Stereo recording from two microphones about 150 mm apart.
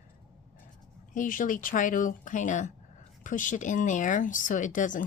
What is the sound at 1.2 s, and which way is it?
Speech, 65° left (ahead or behind).